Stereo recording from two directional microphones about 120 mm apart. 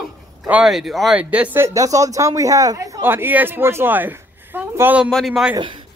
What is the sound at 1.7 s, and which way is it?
Speech, 30° right (ahead or behind).